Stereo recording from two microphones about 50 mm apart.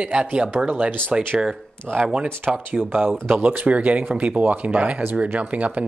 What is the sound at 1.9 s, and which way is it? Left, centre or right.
Speech, centre.